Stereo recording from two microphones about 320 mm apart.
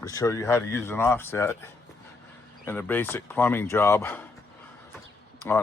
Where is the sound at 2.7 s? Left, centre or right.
Centre.